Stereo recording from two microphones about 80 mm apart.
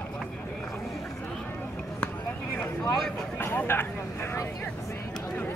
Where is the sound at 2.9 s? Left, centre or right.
Centre.